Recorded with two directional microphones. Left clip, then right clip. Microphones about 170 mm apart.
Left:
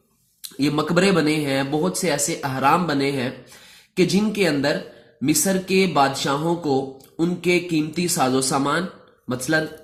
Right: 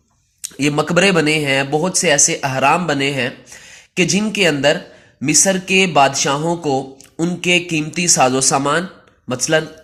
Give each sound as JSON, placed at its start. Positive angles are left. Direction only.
{"t": 0.5, "sound": "speech", "side_deg": -25}